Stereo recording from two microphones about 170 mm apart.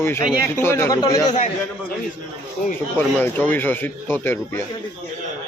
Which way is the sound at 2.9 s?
10° left (ahead or behind).